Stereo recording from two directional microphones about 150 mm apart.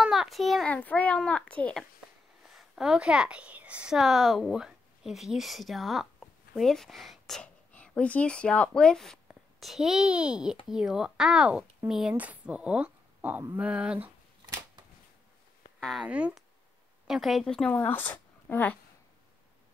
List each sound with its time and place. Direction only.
0.0 s a child's voice: 5° right (ahead or behind)
15.8 s a child's voice: centre (ahead or behind)